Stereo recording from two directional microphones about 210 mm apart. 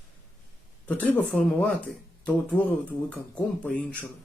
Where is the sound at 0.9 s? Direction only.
5° left (ahead or behind).